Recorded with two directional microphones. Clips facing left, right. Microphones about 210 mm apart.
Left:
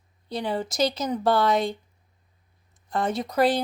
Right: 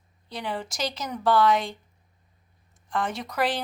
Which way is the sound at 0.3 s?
35° left (ahead or behind).